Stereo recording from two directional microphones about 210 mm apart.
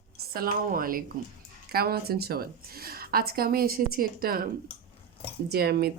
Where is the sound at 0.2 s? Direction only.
45° right (ahead or behind).